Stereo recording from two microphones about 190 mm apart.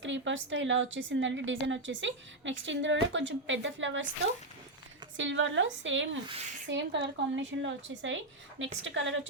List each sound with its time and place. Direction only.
0.0 s a woman's voice: 75° right (ahead or behind)
5.1 s a woman's voice: 80° right